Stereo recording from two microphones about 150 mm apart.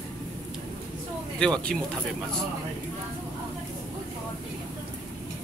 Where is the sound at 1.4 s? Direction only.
5° left (ahead or behind).